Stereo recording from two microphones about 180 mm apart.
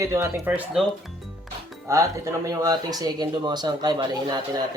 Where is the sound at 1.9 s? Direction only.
15° right (ahead or behind).